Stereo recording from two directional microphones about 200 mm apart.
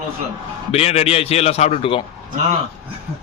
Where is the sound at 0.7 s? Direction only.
30° left (ahead or behind).